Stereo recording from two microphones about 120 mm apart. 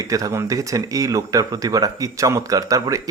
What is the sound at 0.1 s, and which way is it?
Speech, 25° right (ahead or behind).